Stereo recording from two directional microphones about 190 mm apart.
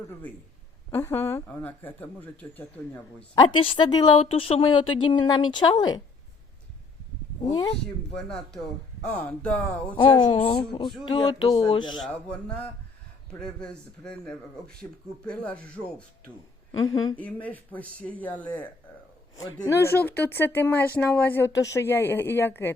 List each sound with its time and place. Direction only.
0.9 s speech: 15° left (ahead or behind)
3.3 s a woman's voice: 25° left (ahead or behind)
7.5 s a woman's voice: 20° left (ahead or behind)
9.0 s speech: 5° left (ahead or behind)
9.9 s a woman's voice: 25° left (ahead or behind)
11.9 s speech: 5° left (ahead or behind)
17.2 s speech: 10° left (ahead or behind)